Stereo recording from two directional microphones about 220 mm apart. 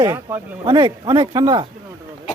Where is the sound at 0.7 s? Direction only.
20° right (ahead or behind).